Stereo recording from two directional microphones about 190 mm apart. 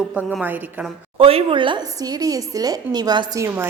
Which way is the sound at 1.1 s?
30° right (ahead or behind).